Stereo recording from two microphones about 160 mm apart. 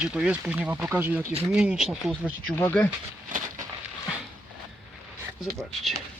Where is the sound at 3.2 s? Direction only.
55° right (ahead or behind).